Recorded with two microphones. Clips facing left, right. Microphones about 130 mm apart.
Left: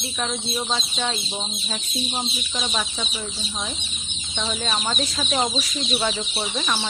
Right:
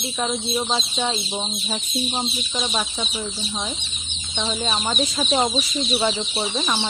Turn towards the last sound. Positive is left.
turn(degrees=-15)  # may be behind; listen again after turning